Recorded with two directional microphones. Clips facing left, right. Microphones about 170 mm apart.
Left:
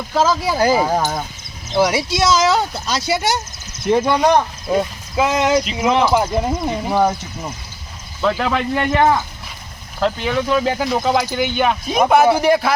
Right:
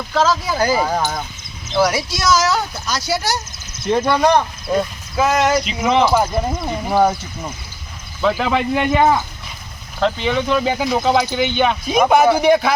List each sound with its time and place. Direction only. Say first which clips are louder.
0.1 s speech: left 1 dB; 10° left (ahead or behind)
1.7 s speech: left 1 dB; 20° left (ahead or behind)
5.6 s speech: even; centre (ahead or behind)
6.1 s speech: even; 15° left (ahead or behind)
6.9 s speech: right 2 dB; 5° right (ahead or behind)
8.2 s speech: right 1 dB; 5° right (ahead or behind)
10.0 s speech: right 1 dB; 5° left (ahead or behind)